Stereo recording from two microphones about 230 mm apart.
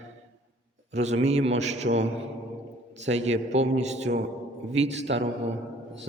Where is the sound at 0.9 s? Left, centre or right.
Right.